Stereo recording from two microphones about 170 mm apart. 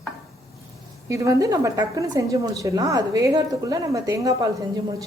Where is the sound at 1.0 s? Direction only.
15° right (ahead or behind).